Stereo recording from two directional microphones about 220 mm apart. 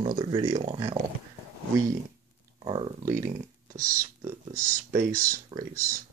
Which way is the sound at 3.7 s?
40° right (ahead or behind).